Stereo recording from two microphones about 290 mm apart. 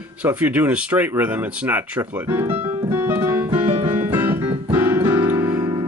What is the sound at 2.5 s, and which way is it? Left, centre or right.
Piano, centre.